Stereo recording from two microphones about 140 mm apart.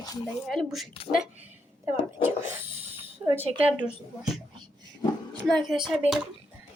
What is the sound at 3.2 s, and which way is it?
Speech, 15° right (ahead or behind).